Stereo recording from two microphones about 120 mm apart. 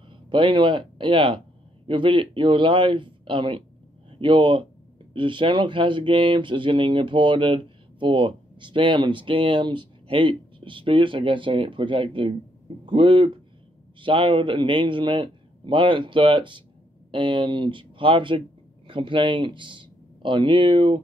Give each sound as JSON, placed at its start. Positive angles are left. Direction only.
{"t": 0.3, "sound": "speech", "side_deg": -45}